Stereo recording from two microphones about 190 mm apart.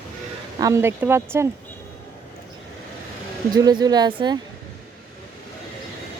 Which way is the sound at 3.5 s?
20° right (ahead or behind).